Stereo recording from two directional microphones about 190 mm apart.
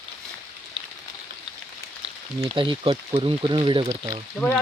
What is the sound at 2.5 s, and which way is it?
Speech, 25° right (ahead or behind).